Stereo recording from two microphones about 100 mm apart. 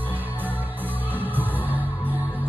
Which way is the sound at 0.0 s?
20° right (ahead or behind).